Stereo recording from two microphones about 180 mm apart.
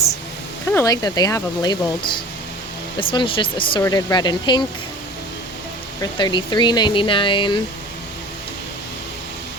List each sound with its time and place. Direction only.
0.7 s speech: 15° left (ahead or behind)
6.0 s speech: 25° left (ahead or behind)